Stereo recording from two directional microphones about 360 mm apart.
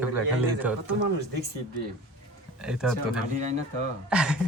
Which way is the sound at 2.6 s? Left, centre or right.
Centre.